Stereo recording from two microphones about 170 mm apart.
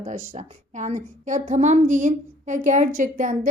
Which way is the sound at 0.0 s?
45° right (ahead or behind).